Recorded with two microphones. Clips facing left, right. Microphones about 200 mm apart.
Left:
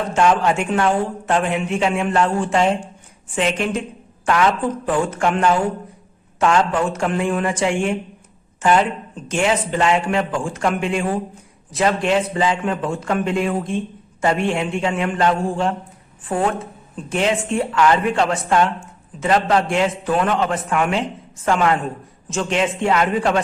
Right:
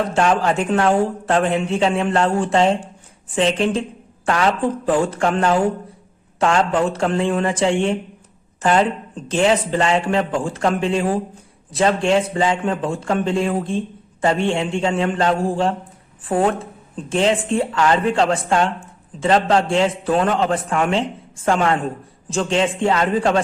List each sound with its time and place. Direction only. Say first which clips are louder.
0.1 s speech: left 1 dB; 35° right (ahead or behind)